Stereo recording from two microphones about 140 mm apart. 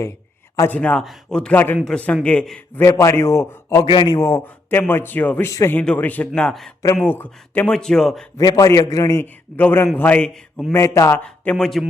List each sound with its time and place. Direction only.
0.7 s a man's voice: 10° left (ahead or behind)
2.8 s a man's voice: 20° left (ahead or behind)
3.8 s a man's voice: 30° left (ahead or behind)
4.4 s a man's voice: 15° left (ahead or behind)
5.5 s a man's voice: 20° left (ahead or behind)
5.7 s a man's voice: 10° left (ahead or behind)
6.8 s a man's voice: 15° left (ahead or behind)
8.4 s a man's voice: 25° left (ahead or behind); by 10.8 s 5° left (ahead or behind)
10.8 s a man's voice: 20° left (ahead or behind)
11.5 s speech: centre (ahead or behind)